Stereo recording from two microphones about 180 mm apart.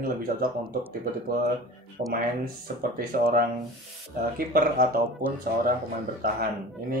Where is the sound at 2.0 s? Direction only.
55° right (ahead or behind).